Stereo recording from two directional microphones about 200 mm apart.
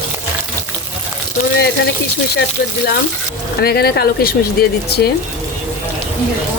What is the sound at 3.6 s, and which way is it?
Speech, 50° left (ahead or behind).